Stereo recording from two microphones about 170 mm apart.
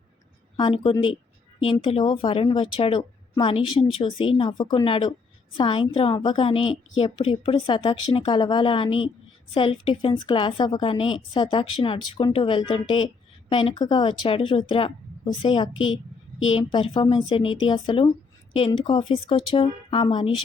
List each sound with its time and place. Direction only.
0.5 s a woman's voice: 30° left (ahead or behind)